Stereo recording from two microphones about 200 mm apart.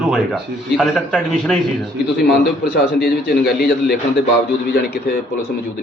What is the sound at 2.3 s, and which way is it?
Speech, 55° left (ahead or behind).